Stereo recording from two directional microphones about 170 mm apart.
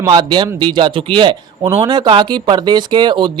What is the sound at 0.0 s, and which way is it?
Speech, 25° right (ahead or behind).